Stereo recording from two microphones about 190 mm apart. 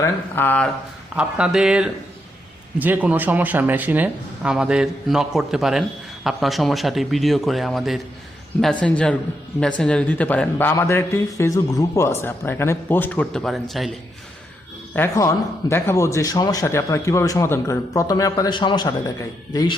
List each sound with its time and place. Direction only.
0.0 s speech: 10° left (ahead or behind)
1.1 s a man's voice: 5° right (ahead or behind)
14.9 s speech: 15° left (ahead or behind)